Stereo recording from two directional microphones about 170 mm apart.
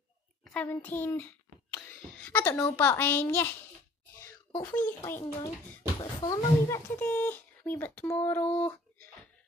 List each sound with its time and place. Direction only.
0.5 s a child's voice: 10° left (ahead or behind)
4.6 s speech: 10° left (ahead or behind)
8.5 s speech: 35° left (ahead or behind)